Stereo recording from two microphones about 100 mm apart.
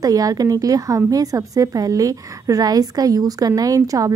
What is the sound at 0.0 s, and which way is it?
A woman's voice, 35° right (ahead or behind).